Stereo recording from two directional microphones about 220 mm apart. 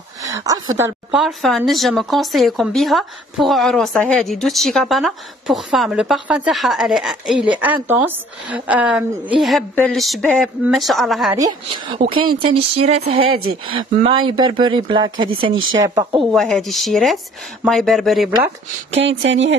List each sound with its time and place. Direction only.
0.2 s a woman's voice: 15° right (ahead or behind)
1.2 s speech: centre (ahead or behind)
11.3 s speech: 20° right (ahead or behind)
13.3 s speech: 70° right (ahead or behind)
13.9 s speech: 25° right (ahead or behind)
16.3 s speech: centre (ahead or behind)
18.9 s speech: 55° right (ahead or behind)